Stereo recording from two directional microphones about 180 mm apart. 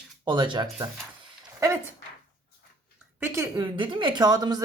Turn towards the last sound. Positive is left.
turn(degrees=-20)  # may be behind; listen again after turning